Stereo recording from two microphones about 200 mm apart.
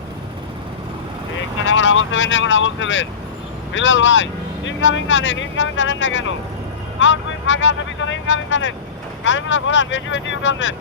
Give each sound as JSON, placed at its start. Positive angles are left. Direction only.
{"t": 1.9, "sound": "speech", "side_deg": 70}